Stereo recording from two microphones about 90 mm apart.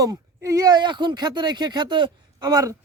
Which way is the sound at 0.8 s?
60° right (ahead or behind).